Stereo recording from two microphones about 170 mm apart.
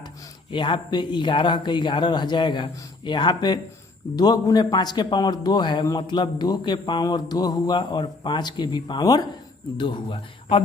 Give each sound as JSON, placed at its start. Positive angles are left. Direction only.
{"t": 0.5, "sound": "a man's voice", "side_deg": 30}